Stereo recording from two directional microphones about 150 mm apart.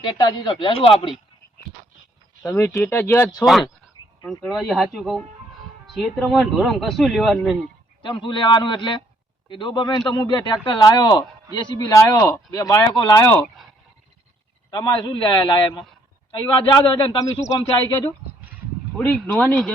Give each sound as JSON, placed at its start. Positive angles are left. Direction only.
{"t": 0.0, "sound": "speech", "side_deg": 30}
{"t": 2.4, "sound": "speech", "side_deg": 15}
{"t": 4.4, "sound": "speech", "side_deg": 0}
{"t": 8.0, "sound": "speech", "side_deg": 30}
{"t": 14.7, "sound": "speech", "side_deg": 30}
{"t": 18.9, "sound": "speech", "side_deg": 10}